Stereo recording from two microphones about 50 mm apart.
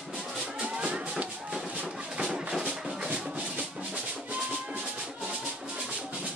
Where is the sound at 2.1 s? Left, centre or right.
Centre.